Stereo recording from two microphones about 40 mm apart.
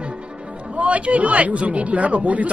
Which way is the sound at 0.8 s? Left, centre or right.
Right.